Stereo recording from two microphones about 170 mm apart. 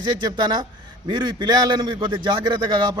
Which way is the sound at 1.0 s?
25° right (ahead or behind).